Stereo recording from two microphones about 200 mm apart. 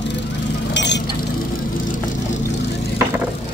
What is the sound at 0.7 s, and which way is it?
Vehicle, 60° left (ahead or behind).